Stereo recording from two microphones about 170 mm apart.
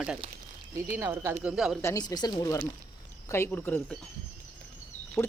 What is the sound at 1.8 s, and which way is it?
Speech, 20° left (ahead or behind).